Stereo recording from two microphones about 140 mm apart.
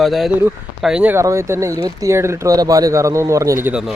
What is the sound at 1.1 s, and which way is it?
A man's voice, 20° right (ahead or behind).